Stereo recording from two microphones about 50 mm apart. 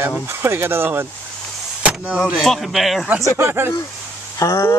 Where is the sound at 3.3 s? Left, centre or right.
Right.